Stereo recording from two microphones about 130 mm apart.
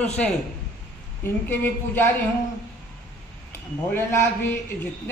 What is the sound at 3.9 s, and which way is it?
Speech, 15° left (ahead or behind).